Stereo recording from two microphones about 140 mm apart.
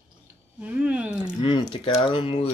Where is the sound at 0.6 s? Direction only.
10° right (ahead or behind).